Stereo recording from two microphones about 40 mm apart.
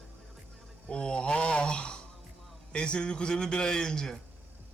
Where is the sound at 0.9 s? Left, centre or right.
Left.